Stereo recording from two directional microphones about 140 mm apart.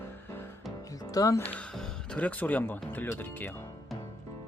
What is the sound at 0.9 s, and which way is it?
Music, 25° left (ahead or behind).